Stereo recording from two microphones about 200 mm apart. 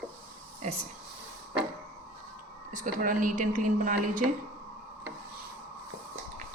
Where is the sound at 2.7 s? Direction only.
40° right (ahead or behind).